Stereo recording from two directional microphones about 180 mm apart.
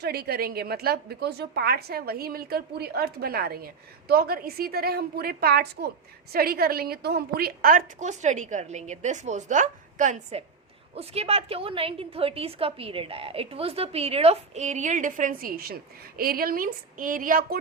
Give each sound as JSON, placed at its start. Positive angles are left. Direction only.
{"t": 0.0, "sound": "a woman's voice", "side_deg": -60}